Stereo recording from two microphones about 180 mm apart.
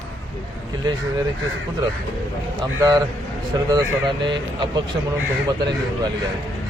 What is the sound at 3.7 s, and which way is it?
Speech, 25° right (ahead or behind).